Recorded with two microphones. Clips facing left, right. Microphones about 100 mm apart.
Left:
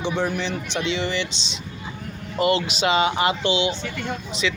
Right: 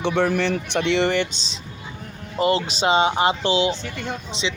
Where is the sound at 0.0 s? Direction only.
65° right (ahead or behind); by 3.8 s 35° right (ahead or behind).